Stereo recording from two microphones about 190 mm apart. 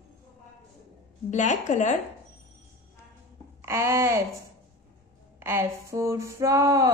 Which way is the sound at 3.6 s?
15° right (ahead or behind).